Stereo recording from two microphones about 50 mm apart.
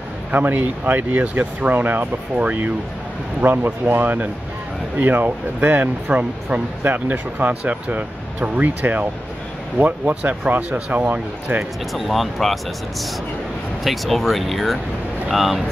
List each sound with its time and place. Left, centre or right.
0.3 s speech: right
3.3 s speech: right
6.0 s speech: right
6.8 s speech: right
11.9 s speech: centre
13.8 s speech: centre